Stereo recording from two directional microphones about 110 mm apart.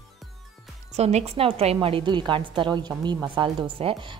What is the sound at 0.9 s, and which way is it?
A woman's voice, 90° right.